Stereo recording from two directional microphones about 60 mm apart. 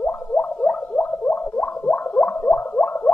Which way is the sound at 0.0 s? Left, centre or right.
Left.